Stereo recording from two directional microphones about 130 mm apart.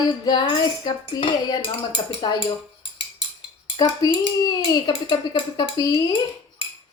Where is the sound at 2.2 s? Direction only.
35° left (ahead or behind).